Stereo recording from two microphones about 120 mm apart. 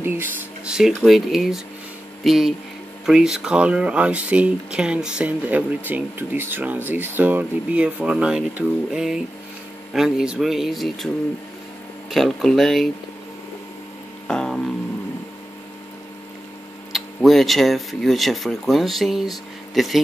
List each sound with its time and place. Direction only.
0.0 s speech: 20° right (ahead or behind)
0.7 s speech: 5° right (ahead or behind)
12.1 s speech: centre (ahead or behind)
14.2 s music: 5° left (ahead or behind)
16.9 s speech: centre (ahead or behind)